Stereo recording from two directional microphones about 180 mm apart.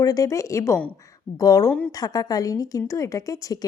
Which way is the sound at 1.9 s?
20° left (ahead or behind).